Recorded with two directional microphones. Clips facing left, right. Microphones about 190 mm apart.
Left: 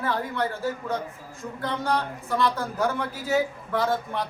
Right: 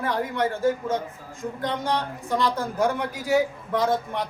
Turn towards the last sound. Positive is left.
turn(degrees=-20)  # may be behind; listen again after turning